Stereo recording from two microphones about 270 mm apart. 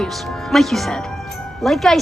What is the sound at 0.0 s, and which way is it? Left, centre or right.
A woman's voice, centre.